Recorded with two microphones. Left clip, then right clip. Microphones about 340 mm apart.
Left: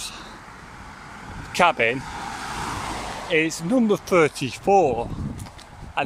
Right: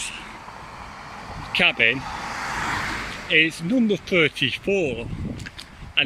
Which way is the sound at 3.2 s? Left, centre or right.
Left.